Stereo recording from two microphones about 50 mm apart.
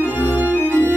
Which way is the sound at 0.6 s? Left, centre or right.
Left.